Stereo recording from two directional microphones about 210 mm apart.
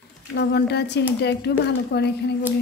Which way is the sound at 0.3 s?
50° left (ahead or behind).